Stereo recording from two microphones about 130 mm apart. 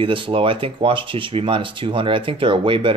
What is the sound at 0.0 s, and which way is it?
Speech, 40° right (ahead or behind).